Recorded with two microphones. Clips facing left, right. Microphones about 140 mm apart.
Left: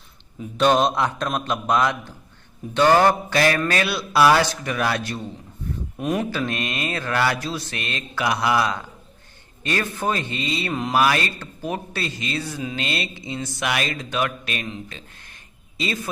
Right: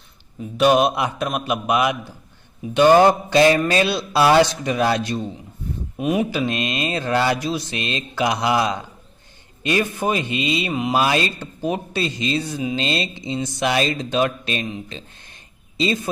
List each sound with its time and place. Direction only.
0.3 s a man's voice: 5° right (ahead or behind)
10.9 s a woman's voice: 20° right (ahead or behind)